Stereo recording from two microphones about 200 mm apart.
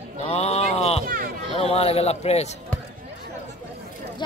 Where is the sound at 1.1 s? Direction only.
45° right (ahead or behind).